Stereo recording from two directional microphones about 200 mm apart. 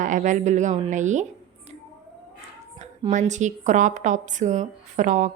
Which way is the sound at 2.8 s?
35° right (ahead or behind).